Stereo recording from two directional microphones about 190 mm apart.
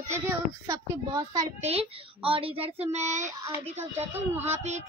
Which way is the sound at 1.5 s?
35° right (ahead or behind).